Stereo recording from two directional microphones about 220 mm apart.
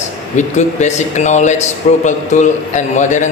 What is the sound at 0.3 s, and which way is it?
A man's voice, 30° left (ahead or behind).